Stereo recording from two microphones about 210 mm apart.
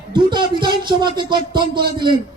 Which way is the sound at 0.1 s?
20° right (ahead or behind).